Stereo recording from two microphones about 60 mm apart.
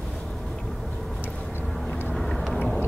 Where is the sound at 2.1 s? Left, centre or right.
Centre.